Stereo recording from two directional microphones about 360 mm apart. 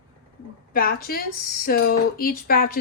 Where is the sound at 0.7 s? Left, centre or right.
Left.